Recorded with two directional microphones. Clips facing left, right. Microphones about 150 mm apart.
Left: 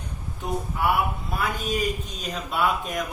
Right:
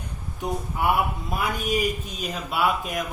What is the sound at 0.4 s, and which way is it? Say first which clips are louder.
A woman's voice: right 1 dB; 15° right (ahead or behind).